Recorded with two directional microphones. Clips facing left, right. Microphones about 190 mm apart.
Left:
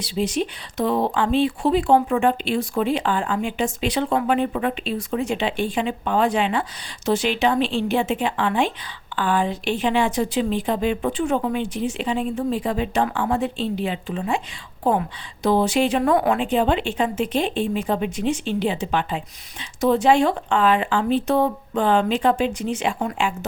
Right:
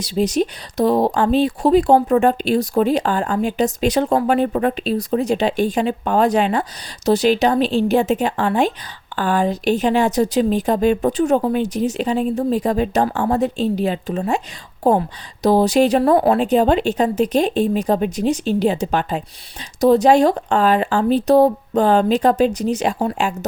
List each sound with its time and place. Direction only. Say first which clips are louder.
0.0 s speech: right 5 dB; 40° right (ahead or behind)